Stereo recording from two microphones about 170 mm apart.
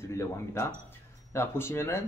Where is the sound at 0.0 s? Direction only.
15° left (ahead or behind).